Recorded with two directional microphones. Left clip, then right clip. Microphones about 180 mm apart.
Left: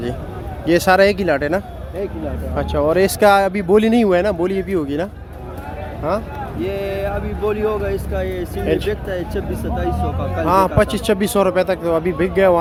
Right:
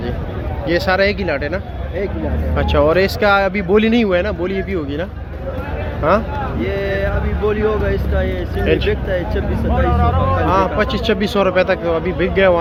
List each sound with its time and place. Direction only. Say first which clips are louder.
0.7 s speech: left 3 dB; 40° left (ahead or behind)
2.6 s a man's voice: right 3 dB; 20° left (ahead or behind)
3.0 s speech: left 1 dB; 30° left (ahead or behind)
6.0 s speech: right 6 dB; 10° left (ahead or behind)
6.6 s speech: right 1 dB; 65° left (ahead or behind); by 8.6 s 80° left
8.6 s a man's voice: right 3 dB; 20° left (ahead or behind)
8.9 s speech: right 3 dB; 90° left
10.4 s a man's voice: left 4 dB; 30° left (ahead or behind)